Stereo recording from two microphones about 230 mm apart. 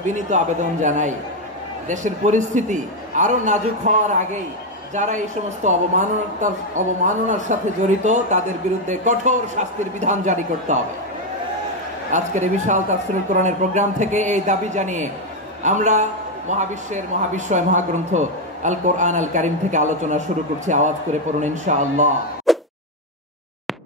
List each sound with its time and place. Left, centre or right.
0.0 s a man's voice: right
12.1 s a man's voice: right
22.5 s a sound: centre